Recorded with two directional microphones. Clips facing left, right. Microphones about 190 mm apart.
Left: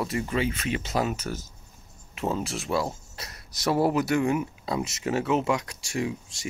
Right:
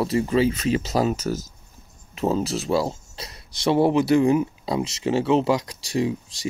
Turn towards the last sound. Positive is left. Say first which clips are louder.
# right 6 dB
turn(degrees=-35)  # may be behind; listen again after turning